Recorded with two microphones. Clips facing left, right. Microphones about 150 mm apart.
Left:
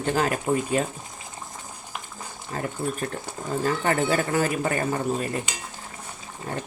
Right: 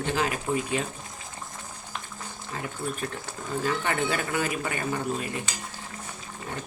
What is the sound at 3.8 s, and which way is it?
Speech, 40° left (ahead or behind).